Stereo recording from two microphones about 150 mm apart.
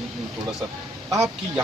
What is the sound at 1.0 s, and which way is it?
Speech, 20° right (ahead or behind).